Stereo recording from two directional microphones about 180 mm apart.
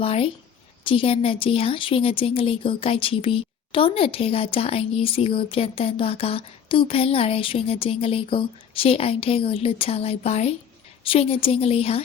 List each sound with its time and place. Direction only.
0.0 s a woman's voice: 30° left (ahead or behind)